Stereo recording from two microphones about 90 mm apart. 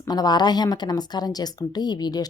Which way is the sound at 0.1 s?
50° left (ahead or behind).